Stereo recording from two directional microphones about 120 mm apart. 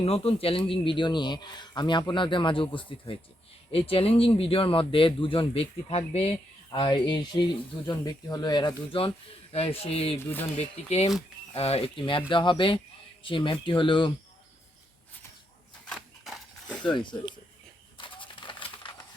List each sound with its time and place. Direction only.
0.0 s speech: 55° left (ahead or behind)
6.7 s speech: 35° left (ahead or behind)
9.0 s speech: 50° left (ahead or behind)
10.2 s speech: 20° left (ahead or behind)
10.5 s speech: 65° left (ahead or behind); by 14.1 s 45° left (ahead or behind)
15.9 s a sound: centre (ahead or behind)
16.8 s speech: 40° left (ahead or behind)
17.9 s a sound: 45° left (ahead or behind)